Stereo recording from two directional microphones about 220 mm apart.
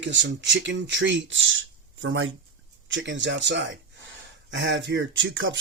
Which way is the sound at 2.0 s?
65° right (ahead or behind).